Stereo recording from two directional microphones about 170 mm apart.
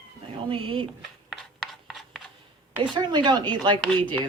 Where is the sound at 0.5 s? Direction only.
30° right (ahead or behind).